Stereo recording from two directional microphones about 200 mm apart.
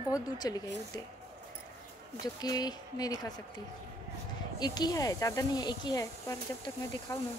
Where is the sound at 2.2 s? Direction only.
20° left (ahead or behind).